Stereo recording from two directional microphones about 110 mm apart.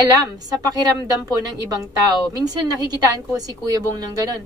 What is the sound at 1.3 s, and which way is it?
A woman's voice, 35° right (ahead or behind).